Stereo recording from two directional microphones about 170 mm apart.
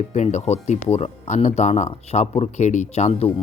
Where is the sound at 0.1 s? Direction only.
45° left (ahead or behind).